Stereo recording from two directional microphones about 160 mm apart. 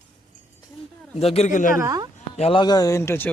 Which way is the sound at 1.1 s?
40° left (ahead or behind).